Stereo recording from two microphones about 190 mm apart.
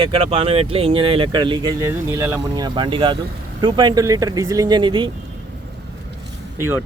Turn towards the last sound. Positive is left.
turn(degrees=-10)  # may be behind; listen again after turning